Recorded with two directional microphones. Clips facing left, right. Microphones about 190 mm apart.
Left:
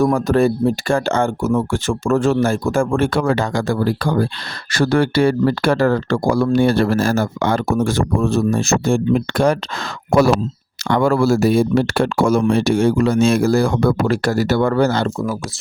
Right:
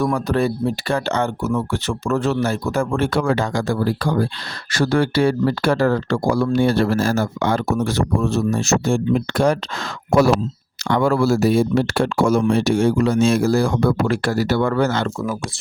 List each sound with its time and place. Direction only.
0.0 s speech: 45° left (ahead or behind)
10.1 s speech: 55° left (ahead or behind)
14.1 s speech: 40° left (ahead or behind)